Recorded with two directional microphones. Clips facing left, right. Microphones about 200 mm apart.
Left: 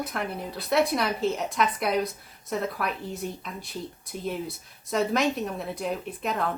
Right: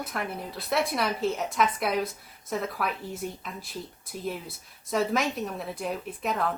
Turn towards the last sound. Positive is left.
turn(degrees=0)  # may be behind; listen again after turning